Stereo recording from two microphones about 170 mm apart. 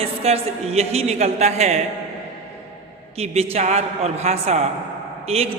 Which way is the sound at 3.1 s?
35° right (ahead or behind).